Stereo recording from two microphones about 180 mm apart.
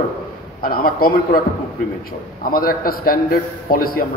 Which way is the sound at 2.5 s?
55° left (ahead or behind).